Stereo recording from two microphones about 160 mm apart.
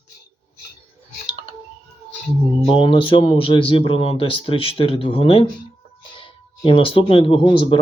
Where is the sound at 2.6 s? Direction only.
35° left (ahead or behind).